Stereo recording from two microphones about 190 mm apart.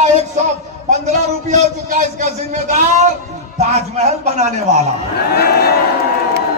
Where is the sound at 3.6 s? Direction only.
35° right (ahead or behind).